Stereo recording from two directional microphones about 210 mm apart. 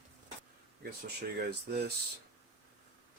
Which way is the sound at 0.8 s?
50° right (ahead or behind).